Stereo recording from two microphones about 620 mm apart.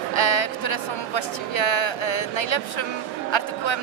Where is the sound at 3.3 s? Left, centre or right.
Left.